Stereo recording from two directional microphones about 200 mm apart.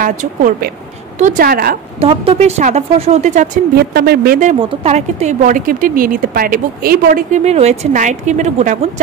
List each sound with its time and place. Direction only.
0.0 s speech: 40° right (ahead or behind)
2.0 s speech: 30° right (ahead or behind)
3.7 s speech: 50° right (ahead or behind); by 9.0 s 35° right (ahead or behind)